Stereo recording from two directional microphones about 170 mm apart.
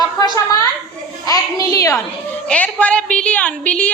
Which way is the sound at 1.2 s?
20° left (ahead or behind).